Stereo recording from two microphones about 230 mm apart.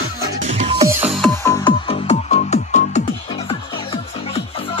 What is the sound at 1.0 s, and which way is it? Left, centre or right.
Music, centre.